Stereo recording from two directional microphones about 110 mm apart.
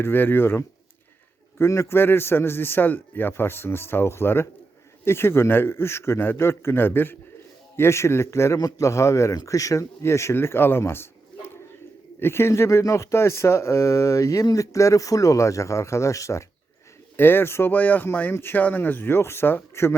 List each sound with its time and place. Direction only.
0.0 s speech: 20° left (ahead or behind)